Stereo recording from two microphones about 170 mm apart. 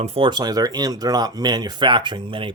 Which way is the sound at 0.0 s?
40° right (ahead or behind).